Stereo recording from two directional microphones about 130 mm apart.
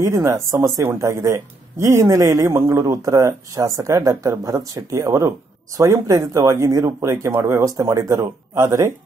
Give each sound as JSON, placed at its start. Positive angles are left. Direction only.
{"t": 0.0, "sound": "speech", "side_deg": -25}